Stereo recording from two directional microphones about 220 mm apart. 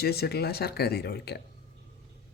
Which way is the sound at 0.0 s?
45° left (ahead or behind).